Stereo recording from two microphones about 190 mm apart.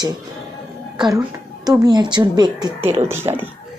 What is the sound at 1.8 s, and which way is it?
Speech, 20° right (ahead or behind).